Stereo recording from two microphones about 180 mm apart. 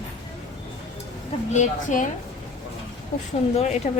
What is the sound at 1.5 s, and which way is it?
Speech, 45° left (ahead or behind).